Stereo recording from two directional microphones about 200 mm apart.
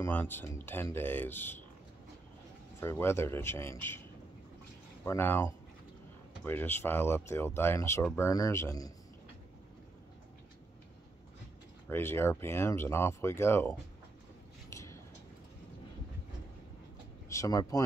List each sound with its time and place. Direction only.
0.0 s speech: 10° left (ahead or behind)
2.8 s speech: 15° left (ahead or behind)
5.0 s speech: 10° left (ahead or behind)
11.9 s speech: 10° left (ahead or behind)
14.7 s a sound: 15° left (ahead or behind)
17.3 s speech: 15° left (ahead or behind)